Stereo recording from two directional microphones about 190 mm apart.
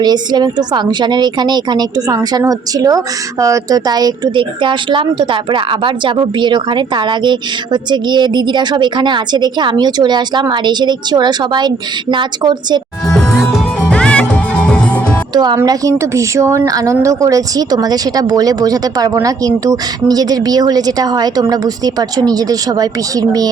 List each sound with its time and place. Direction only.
0.0 s a woman's voice: 20° right (ahead or behind)
13.5 s music: 5° left (ahead or behind)
15.3 s a woman's voice: 20° right (ahead or behind)